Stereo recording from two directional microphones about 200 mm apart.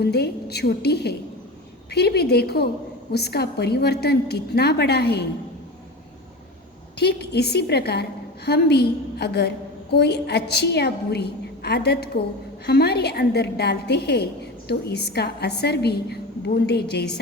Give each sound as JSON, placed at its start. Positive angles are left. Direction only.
{"t": 0.0, "sound": "a woman's voice", "side_deg": 55}
{"t": 7.0, "sound": "a woman's voice", "side_deg": 55}